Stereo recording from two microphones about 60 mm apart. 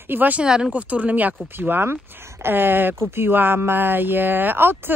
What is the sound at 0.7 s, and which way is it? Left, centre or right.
Speech, right.